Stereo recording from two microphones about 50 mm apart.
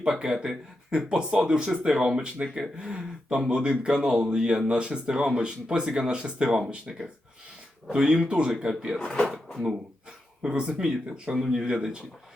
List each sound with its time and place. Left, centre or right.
0.1 s speech: centre
7.9 s speech: centre
9.2 s speech: centre
10.4 s speech: centre